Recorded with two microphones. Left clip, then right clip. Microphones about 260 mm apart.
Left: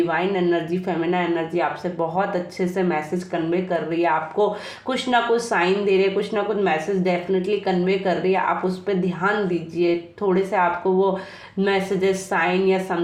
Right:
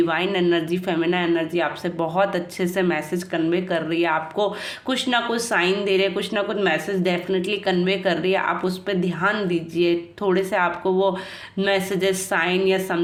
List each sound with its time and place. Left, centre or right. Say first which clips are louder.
0.1 s speech: even; right